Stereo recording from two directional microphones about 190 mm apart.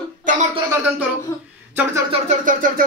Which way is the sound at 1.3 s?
15° left (ahead or behind).